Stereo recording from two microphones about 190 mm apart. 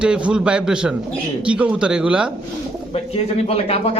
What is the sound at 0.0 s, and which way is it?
Speech, 5° right (ahead or behind).